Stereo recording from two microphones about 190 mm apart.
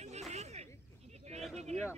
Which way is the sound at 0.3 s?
35° right (ahead or behind).